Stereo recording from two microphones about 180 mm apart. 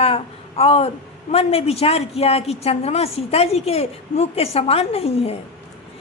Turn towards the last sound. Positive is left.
turn(degrees=35)  # may be behind; listen again after turning